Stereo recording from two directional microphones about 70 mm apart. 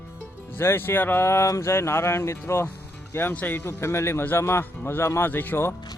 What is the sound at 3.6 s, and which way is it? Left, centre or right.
Speech, left.